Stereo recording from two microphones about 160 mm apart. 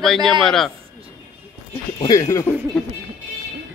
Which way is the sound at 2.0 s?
20° left (ahead or behind).